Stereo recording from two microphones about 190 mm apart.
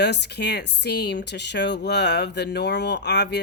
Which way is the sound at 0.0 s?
60° left (ahead or behind).